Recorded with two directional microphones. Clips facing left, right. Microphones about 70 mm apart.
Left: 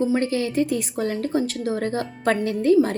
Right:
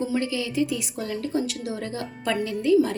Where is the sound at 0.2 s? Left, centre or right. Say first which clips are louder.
Left 3 dB; left.